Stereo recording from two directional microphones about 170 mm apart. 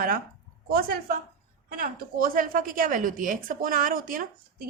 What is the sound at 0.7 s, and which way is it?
A woman's voice, 60° right (ahead or behind).